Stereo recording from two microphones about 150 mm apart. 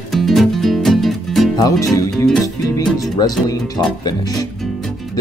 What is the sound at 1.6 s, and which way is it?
Speech, 20° left (ahead or behind).